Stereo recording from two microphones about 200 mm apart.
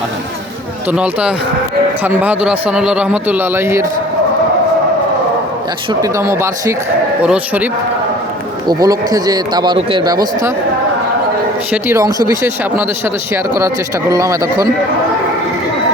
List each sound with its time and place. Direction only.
0.9 s a man's voice: 5° right (ahead or behind)
5.9 s a man's voice: 15° right (ahead or behind)
8.6 s speech: 20° right (ahead or behind)
11.7 s a man's voice: 15° right (ahead or behind)
14.1 s a man's voice: 15° right (ahead or behind)